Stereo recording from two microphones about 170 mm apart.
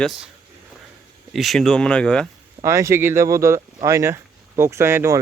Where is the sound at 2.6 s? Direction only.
15° right (ahead or behind).